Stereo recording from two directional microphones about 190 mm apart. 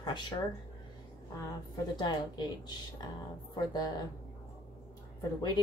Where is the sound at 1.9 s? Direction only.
20° left (ahead or behind).